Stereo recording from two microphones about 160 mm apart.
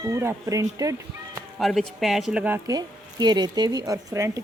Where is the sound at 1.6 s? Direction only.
Centre (ahead or behind).